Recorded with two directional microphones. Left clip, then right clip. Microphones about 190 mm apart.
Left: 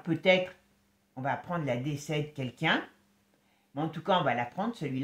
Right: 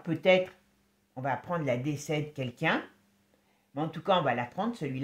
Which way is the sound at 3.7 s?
35° right (ahead or behind).